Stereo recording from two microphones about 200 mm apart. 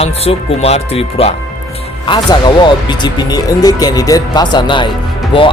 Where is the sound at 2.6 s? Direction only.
20° left (ahead or behind).